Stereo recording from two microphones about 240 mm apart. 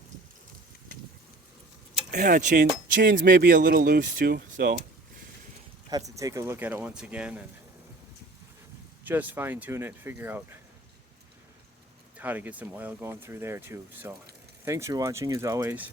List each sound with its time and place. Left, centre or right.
2.0 s speech: right
6.1 s speech: centre
9.0 s speech: centre
12.1 s speech: centre